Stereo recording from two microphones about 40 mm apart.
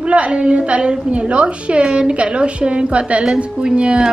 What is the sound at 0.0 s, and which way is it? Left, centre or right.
A woman's voice, right.